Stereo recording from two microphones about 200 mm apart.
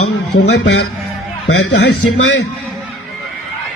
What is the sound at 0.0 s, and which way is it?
Speech, 75° left (ahead or behind).